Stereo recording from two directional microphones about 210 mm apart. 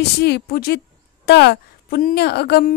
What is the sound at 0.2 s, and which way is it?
A woman's voice, 50° left (ahead or behind).